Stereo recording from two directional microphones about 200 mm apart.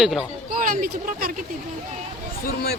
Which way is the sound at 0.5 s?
45° right (ahead or behind).